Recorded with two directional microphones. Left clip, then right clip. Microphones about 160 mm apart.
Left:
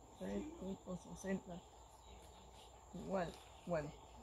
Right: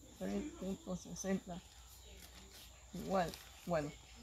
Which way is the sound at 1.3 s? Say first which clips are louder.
Right 3 dB; 20° left (ahead or behind).